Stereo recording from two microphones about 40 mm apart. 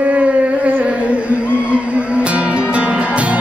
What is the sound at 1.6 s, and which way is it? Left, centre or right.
Music, right.